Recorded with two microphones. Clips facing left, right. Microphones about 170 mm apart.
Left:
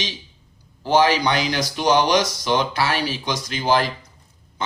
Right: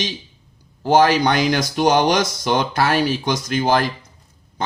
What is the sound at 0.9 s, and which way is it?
Speech, 50° right (ahead or behind).